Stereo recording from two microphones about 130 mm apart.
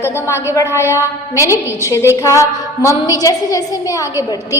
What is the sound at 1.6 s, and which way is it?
Speech, 15° right (ahead or behind).